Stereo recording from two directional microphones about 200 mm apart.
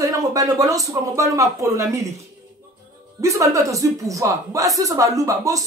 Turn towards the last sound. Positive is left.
turn(degrees=-15)  # may be behind; listen again after turning